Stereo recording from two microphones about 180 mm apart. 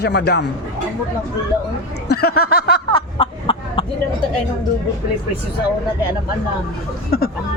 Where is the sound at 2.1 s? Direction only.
60° left (ahead or behind).